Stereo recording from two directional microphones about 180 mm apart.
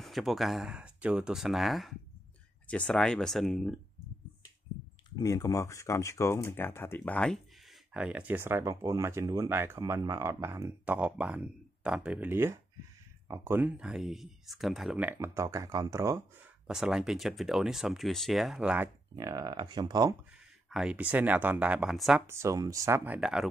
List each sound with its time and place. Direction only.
0.0 s speech: centre (ahead or behind)
5.2 s speech: 15° left (ahead or behind)
7.9 s speech: 5° right (ahead or behind)
16.6 s speech: 5° right (ahead or behind)
19.1 s speech: 20° right (ahead or behind)
20.7 s speech: 5° right (ahead or behind)
22.2 s speech: 15° right (ahead or behind)